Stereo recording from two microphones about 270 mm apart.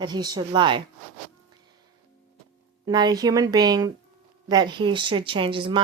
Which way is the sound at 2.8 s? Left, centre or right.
Centre.